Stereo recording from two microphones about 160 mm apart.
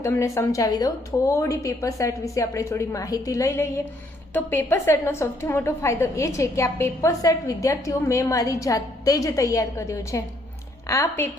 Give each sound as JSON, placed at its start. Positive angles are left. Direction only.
{"t": 0.0, "sound": "a woman's voice", "side_deg": 15}